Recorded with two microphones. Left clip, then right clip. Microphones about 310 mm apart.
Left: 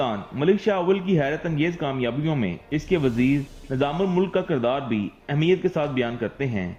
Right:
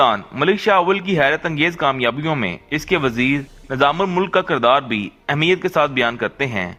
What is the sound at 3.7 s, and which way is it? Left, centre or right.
A man's voice, right.